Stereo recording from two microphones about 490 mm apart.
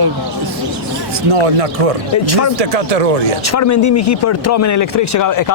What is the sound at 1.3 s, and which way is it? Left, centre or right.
Speech, right.